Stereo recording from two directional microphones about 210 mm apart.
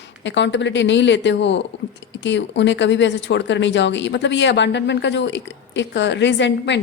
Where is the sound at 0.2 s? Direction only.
60° left (ahead or behind).